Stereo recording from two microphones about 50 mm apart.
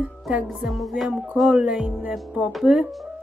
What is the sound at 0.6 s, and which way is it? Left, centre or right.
Music, centre.